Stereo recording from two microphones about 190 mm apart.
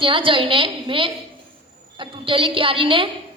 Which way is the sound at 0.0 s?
25° right (ahead or behind).